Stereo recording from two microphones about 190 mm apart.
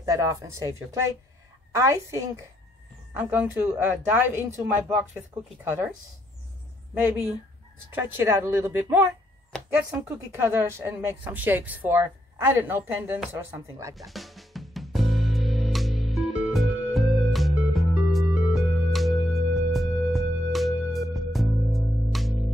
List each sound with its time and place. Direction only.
0.0 s speech: 15° right (ahead or behind)
6.9 s a woman's voice: 10° right (ahead or behind)
9.5 s speech: centre (ahead or behind)
13.9 s music: centre (ahead or behind)